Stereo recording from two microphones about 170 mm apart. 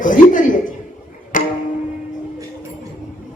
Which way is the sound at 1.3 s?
50° left (ahead or behind).